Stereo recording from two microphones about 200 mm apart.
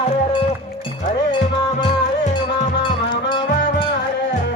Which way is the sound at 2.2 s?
35° left (ahead or behind).